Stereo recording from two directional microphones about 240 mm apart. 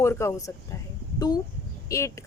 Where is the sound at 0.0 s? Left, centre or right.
Centre.